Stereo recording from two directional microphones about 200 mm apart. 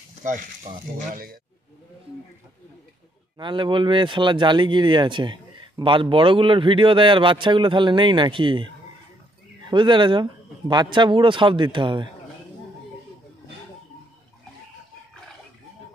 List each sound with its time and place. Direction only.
0.2 s speech: 40° right (ahead or behind)
3.3 s speech: 25° right (ahead or behind)
9.7 s speech: 25° right (ahead or behind)